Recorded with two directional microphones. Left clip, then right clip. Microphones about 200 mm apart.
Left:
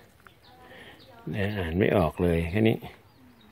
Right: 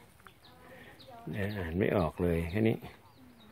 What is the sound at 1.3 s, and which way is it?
Speech, 15° left (ahead or behind).